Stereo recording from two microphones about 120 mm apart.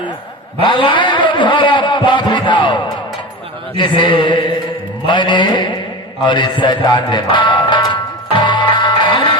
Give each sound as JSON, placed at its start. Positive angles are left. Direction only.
{"t": 0.6, "sound": "a sound", "side_deg": 40}
{"t": 6.2, "sound": "speech", "side_deg": 40}
{"t": 8.3, "sound": "music", "side_deg": 40}